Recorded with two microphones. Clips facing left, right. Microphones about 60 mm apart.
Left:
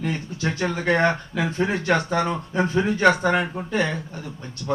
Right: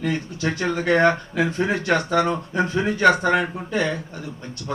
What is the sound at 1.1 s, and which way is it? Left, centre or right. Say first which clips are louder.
Speech: right 3 dB; left.